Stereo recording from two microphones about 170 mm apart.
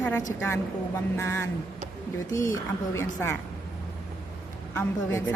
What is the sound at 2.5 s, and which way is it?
Speech, 15° left (ahead or behind).